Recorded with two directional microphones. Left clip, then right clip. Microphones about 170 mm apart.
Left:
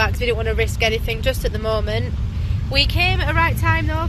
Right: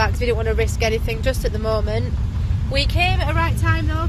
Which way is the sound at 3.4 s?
15° left (ahead or behind).